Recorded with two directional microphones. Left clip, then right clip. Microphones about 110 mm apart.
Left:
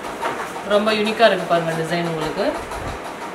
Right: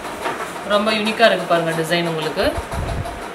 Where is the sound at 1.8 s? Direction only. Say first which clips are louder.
Right 2 dB; 20° right (ahead or behind).